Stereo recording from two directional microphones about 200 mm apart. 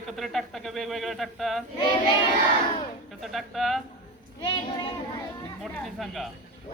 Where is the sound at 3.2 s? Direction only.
Centre (ahead or behind).